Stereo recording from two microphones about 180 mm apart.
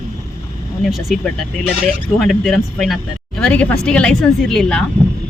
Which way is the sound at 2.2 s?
5° left (ahead or behind).